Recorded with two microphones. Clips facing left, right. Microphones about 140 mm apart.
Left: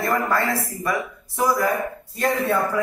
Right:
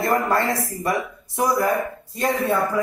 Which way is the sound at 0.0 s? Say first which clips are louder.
Right 2 dB; 30° right (ahead or behind).